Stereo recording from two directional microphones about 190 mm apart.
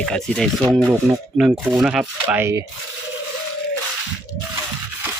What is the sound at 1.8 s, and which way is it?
Speech, 5° right (ahead or behind).